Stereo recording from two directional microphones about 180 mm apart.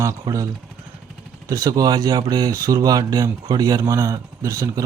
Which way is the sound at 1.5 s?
20° right (ahead or behind).